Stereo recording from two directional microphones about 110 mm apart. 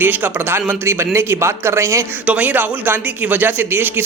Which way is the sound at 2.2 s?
15° right (ahead or behind).